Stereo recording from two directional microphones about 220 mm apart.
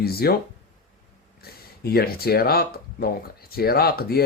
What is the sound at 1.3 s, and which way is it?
Speech, 45° left (ahead or behind).